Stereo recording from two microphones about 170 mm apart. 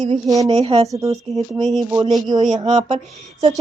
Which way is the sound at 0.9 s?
20° right (ahead or behind).